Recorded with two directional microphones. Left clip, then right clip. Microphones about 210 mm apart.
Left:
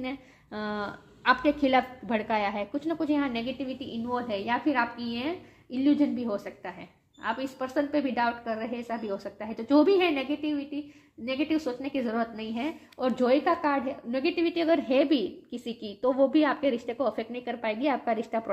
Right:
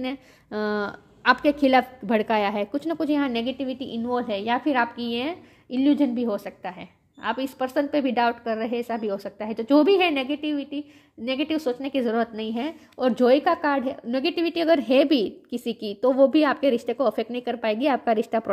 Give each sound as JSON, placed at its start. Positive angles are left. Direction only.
{"t": 0.0, "sound": "a woman's voice", "side_deg": -45}